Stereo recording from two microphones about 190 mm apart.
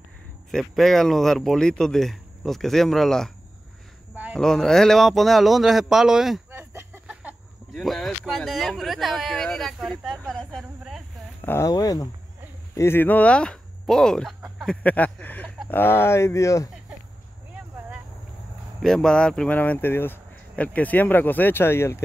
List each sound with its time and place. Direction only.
0.5 s speech: centre (ahead or behind)
4.1 s a sound: 10° right (ahead or behind)
4.4 s speech: 5° left (ahead or behind)
6.7 s a sound: 10° right (ahead or behind)
7.7 s speech: centre (ahead or behind)
11.4 s speech: 15° left (ahead or behind)
18.8 s speech: 5° left (ahead or behind)